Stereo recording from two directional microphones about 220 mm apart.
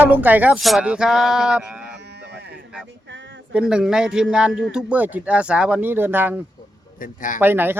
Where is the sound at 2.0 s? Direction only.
50° right (ahead or behind).